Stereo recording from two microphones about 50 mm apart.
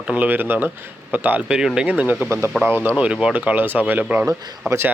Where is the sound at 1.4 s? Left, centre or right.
Centre.